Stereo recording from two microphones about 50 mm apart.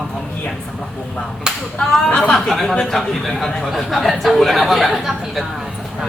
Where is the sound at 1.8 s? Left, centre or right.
Centre.